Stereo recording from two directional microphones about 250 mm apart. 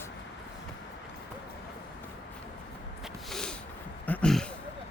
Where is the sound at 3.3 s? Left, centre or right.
Centre.